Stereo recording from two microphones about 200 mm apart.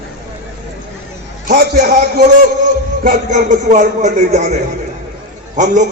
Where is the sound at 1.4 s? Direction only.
45° right (ahead or behind).